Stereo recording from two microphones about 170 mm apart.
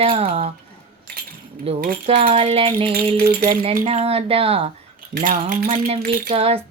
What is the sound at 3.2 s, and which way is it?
Speech, 60° right (ahead or behind).